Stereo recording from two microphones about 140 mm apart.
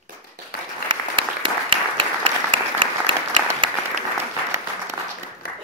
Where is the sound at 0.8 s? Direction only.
35° right (ahead or behind).